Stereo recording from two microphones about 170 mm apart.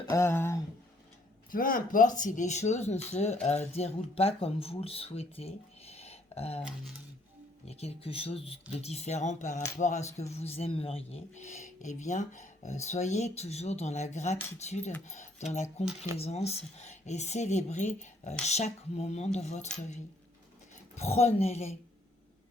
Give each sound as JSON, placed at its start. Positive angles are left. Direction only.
{"t": 0.1, "sound": "a sound", "side_deg": 15}
{"t": 1.5, "sound": "speech", "side_deg": 55}
{"t": 7.7, "sound": "speech", "side_deg": 40}
{"t": 20.9, "sound": "speech", "side_deg": 40}